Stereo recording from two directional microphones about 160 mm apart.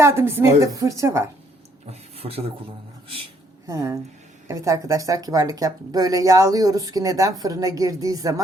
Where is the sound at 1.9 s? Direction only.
40° right (ahead or behind).